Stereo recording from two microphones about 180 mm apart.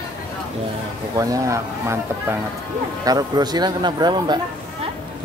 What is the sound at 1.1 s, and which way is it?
Speech, 20° right (ahead or behind).